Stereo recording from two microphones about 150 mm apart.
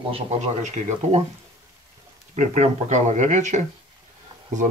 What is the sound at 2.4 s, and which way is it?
Speech, 50° right (ahead or behind).